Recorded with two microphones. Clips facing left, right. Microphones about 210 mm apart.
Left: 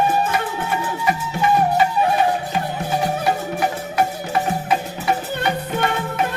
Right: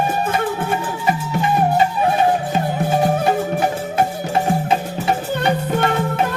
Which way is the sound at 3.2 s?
25° right (ahead or behind).